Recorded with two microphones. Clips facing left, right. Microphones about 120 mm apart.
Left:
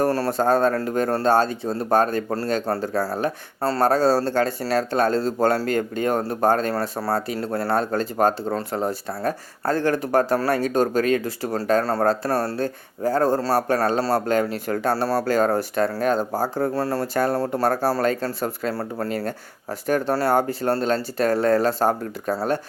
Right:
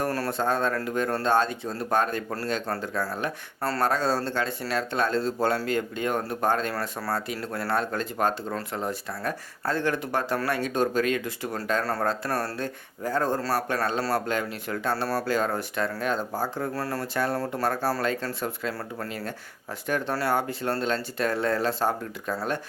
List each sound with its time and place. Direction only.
0.0 s speech: 35° left (ahead or behind)
19.0 s speech: 45° left (ahead or behind)